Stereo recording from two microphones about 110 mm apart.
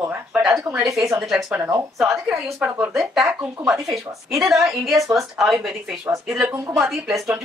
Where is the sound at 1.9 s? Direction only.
Centre (ahead or behind).